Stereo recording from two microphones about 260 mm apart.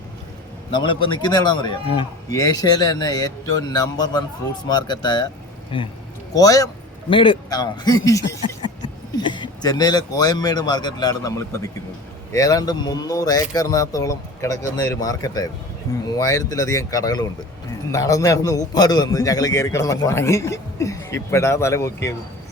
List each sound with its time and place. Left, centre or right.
0.7 s a man's voice: centre
6.3 s a man's voice: centre